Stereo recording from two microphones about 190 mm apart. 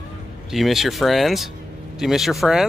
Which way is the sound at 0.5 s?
Centre (ahead or behind).